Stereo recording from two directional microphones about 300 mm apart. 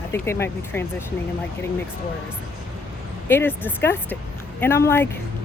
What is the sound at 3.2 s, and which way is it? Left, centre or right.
Speech, centre.